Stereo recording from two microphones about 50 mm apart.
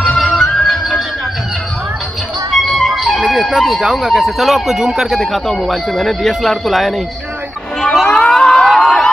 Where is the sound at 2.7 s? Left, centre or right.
Centre.